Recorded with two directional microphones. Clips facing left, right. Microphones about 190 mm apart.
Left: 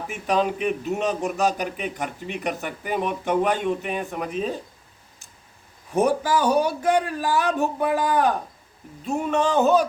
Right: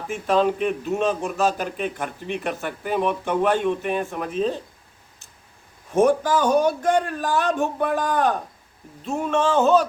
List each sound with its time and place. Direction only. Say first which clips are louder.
0.1 s speech: right 3 dB; 15° left (ahead or behind)
6.1 s speech: right 2 dB; 10° left (ahead or behind)